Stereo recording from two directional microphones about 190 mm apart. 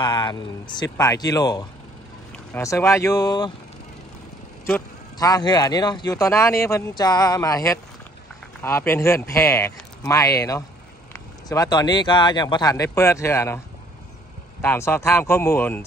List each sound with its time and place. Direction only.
0.0 s speech: 20° left (ahead or behind)
5.2 s speech: 20° left (ahead or behind)
14.6 s speech: 10° left (ahead or behind)